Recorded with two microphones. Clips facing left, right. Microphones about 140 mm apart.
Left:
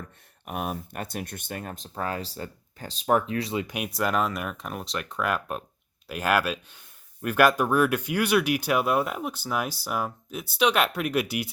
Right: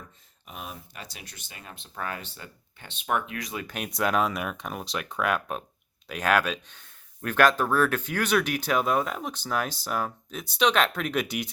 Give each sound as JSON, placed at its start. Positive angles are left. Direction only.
{"t": 0.4, "sound": "speech", "side_deg": 55}
{"t": 3.7, "sound": "speech", "side_deg": 5}